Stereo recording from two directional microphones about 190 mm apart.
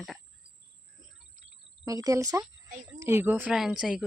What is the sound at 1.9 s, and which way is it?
Speech, 20° right (ahead or behind).